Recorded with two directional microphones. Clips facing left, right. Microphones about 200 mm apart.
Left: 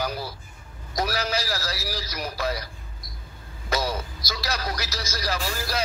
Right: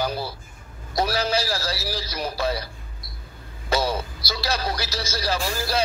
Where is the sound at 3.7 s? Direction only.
30° right (ahead or behind).